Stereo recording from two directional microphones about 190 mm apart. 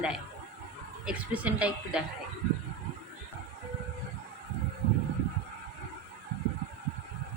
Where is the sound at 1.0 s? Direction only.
5° right (ahead or behind).